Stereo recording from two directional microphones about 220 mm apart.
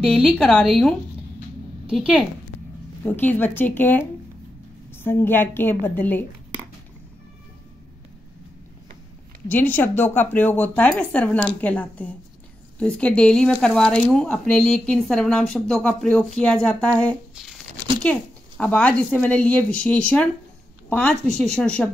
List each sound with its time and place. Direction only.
0.1 s speech: 5° left (ahead or behind)
3.0 s speech: 10° left (ahead or behind)
9.5 s speech: 10° left (ahead or behind)
18.6 s speech: 5° left (ahead or behind)